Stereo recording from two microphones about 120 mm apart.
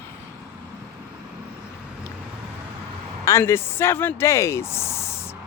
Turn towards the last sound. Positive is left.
turn(degrees=20)  # may be behind; listen again after turning